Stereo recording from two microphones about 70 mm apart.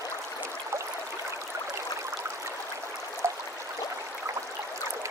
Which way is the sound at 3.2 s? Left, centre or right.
Right.